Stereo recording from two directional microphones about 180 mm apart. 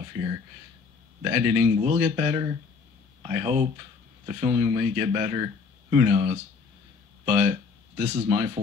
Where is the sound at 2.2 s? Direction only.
15° right (ahead or behind).